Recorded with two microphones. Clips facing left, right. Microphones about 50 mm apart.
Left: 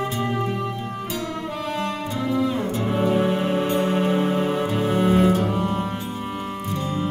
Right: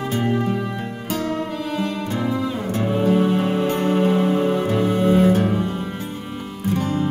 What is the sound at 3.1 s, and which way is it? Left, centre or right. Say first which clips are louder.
Music: right 2 dB; centre.